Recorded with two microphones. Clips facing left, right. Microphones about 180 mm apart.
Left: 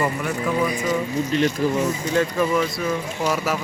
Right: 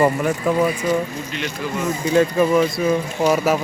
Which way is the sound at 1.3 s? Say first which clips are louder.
Left 7 dB; 40° left (ahead or behind).